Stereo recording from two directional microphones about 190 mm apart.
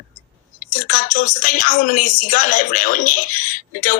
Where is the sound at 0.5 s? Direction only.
45° left (ahead or behind).